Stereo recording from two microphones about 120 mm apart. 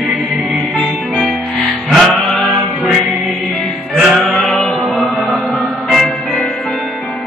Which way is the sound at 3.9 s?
Centre (ahead or behind).